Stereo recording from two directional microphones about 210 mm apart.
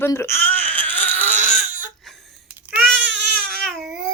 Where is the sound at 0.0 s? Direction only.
10° left (ahead or behind).